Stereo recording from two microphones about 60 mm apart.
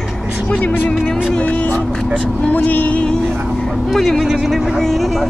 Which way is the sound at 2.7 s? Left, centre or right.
Left.